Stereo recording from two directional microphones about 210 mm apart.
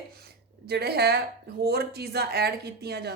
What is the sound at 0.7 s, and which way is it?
Speech, 50° right (ahead or behind).